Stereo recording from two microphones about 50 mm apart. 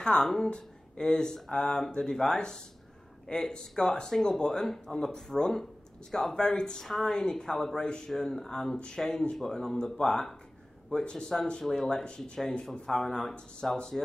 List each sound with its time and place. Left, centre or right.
0.0 s a woman's voice: centre